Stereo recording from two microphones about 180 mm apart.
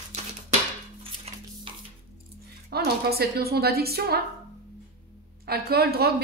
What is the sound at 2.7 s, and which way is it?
A woman's voice, 60° right (ahead or behind).